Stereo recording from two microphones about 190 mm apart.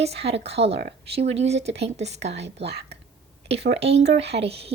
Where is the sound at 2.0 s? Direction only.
35° right (ahead or behind).